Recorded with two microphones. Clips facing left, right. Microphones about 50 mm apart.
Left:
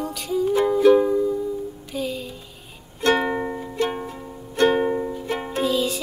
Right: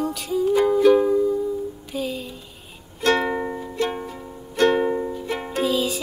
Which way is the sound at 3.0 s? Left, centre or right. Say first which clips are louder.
Even; centre.